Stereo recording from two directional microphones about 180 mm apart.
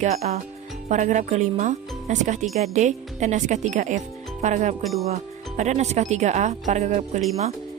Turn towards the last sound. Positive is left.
turn(degrees=-40)  # may be behind; listen again after turning